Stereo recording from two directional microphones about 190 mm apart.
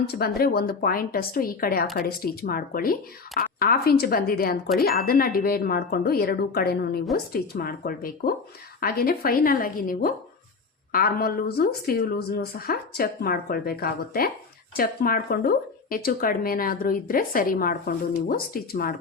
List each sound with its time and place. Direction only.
0.1 s speech: 55° left (ahead or behind)